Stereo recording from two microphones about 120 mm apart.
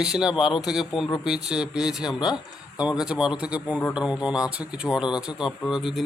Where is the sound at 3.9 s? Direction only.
5° right (ahead or behind).